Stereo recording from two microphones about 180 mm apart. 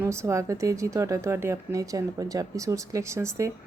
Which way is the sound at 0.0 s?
15° right (ahead or behind).